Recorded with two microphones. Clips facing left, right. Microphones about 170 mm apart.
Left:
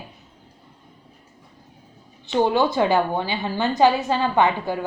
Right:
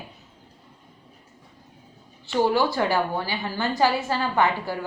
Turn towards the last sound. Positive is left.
turn(degrees=20)  # may be behind; listen again after turning